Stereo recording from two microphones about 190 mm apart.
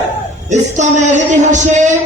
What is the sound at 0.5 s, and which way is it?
Music, 40° right (ahead or behind).